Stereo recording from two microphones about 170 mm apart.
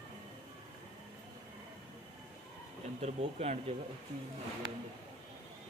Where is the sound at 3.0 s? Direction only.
40° right (ahead or behind).